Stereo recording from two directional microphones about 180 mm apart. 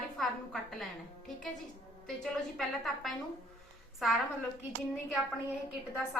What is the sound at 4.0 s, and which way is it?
Speech, centre (ahead or behind).